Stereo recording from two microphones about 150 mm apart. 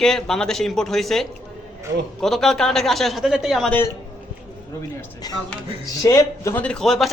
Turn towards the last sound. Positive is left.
turn(degrees=0)  # may be behind; listen again after turning